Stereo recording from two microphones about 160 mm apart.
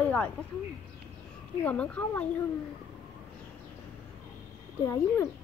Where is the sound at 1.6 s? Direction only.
10° left (ahead or behind).